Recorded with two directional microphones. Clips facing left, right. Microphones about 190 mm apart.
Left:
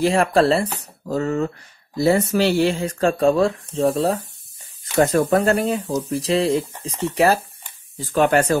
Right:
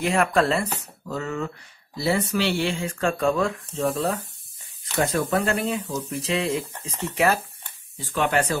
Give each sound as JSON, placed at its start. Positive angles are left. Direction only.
{"t": 0.0, "sound": "speech", "side_deg": 30}